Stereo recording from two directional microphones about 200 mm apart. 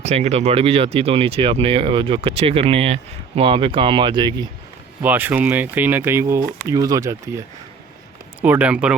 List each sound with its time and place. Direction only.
0.0 s speech: 35° right (ahead or behind)
5.0 s speech: 10° right (ahead or behind)